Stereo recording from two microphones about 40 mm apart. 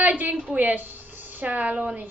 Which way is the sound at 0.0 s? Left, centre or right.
Right.